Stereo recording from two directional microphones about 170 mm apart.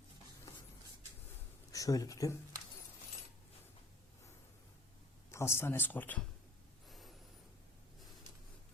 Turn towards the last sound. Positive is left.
turn(degrees=0)  # may be behind; listen again after turning